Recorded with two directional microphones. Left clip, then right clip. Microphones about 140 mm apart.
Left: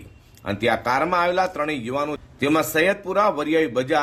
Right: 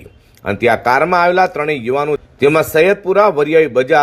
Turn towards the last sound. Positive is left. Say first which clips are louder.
# right 9 dB
turn(degrees=-30)  # may be behind; listen again after turning